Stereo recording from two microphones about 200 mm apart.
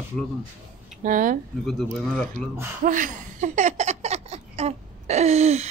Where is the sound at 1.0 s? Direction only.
40° right (ahead or behind).